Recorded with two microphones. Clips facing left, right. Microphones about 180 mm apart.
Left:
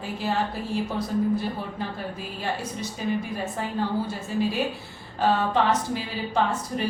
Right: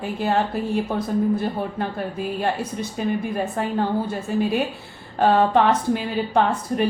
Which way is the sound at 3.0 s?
55° right (ahead or behind).